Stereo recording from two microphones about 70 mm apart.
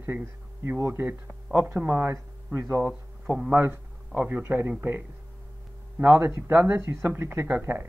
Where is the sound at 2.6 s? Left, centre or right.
Right.